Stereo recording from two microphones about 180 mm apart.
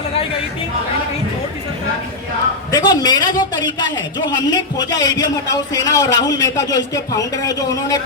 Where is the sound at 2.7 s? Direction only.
20° left (ahead or behind).